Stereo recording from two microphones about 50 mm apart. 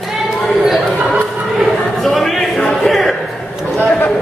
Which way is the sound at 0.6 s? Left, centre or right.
Centre.